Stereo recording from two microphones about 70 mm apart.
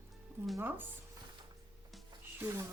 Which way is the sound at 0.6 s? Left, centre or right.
Right.